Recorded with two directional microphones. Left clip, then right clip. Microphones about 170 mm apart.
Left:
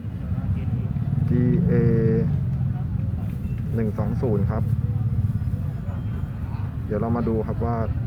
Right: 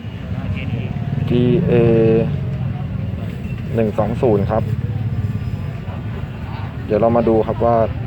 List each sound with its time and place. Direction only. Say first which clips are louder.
1.4 s mantra: right 9 dB; 20° right (ahead or behind)
3.8 s speech: right 11 dB; 15° right (ahead or behind)
6.9 s speech: right 12 dB; 10° right (ahead or behind)